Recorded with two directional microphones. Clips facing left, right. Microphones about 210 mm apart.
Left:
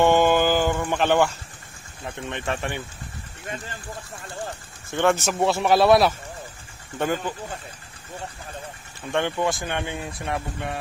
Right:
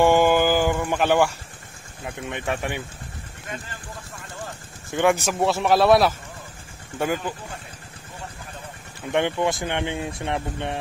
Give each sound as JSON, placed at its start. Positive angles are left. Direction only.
{"t": 0.0, "sound": "a sound", "side_deg": -10}
{"t": 2.0, "sound": "speech", "side_deg": -10}
{"t": 4.9, "sound": "speech", "side_deg": -15}
{"t": 5.2, "sound": "speech", "side_deg": 0}
{"t": 9.1, "sound": "speech", "side_deg": -20}